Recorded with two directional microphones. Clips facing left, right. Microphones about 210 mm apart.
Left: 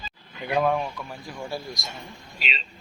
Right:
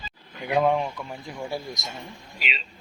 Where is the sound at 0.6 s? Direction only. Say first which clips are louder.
Right 1 dB; 20° right (ahead or behind).